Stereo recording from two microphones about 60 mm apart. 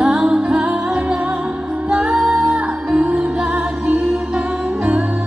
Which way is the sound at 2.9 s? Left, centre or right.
Centre.